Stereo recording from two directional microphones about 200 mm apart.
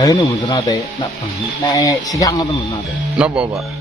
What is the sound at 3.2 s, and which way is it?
Speech, 5° right (ahead or behind).